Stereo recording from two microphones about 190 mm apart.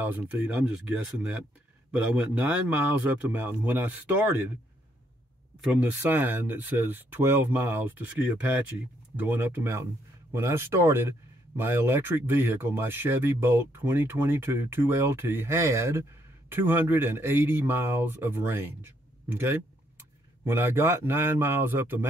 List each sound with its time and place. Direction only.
0.0 s speech: 10° right (ahead or behind)
5.6 s speech: 5° right (ahead or behind)